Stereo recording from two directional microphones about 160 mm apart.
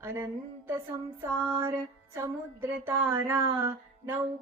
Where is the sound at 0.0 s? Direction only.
15° right (ahead or behind).